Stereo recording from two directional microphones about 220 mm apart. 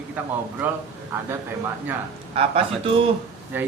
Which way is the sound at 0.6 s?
10° right (ahead or behind).